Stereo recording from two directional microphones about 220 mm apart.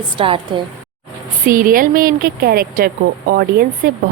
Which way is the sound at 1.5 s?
40° right (ahead or behind).